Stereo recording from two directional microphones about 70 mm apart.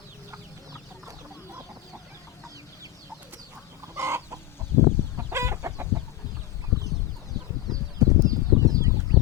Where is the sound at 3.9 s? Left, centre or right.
Right.